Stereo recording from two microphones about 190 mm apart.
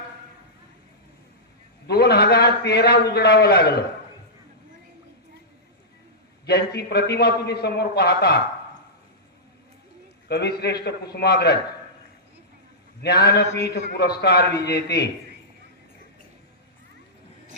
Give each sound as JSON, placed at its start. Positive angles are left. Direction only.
{"t": 1.9, "sound": "a man's voice", "side_deg": 55}
{"t": 6.4, "sound": "a man's voice", "side_deg": 55}
{"t": 10.2, "sound": "a man's voice", "side_deg": 60}
{"t": 13.0, "sound": "a man's voice", "side_deg": 60}